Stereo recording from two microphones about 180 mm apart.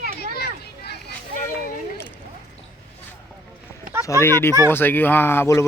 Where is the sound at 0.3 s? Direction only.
65° left (ahead or behind).